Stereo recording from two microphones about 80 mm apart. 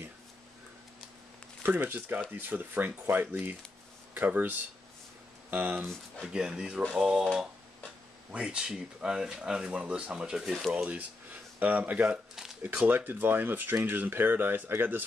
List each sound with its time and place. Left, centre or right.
1.6 s speech: right
6.2 s speech: centre
10.7 s speech: centre